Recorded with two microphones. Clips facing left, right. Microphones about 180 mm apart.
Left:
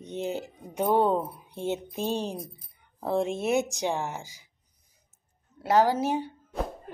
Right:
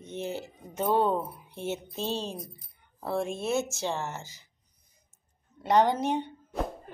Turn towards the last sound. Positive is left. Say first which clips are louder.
# left 1 dB
turn(degrees=5)  # may be behind; listen again after turning